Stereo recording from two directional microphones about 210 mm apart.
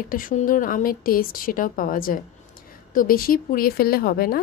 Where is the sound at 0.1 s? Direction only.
40° left (ahead or behind).